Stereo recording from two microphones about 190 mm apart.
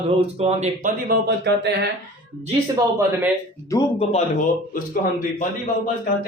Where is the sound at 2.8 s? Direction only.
20° right (ahead or behind).